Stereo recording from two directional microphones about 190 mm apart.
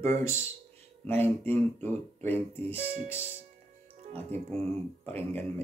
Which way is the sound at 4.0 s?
35° right (ahead or behind).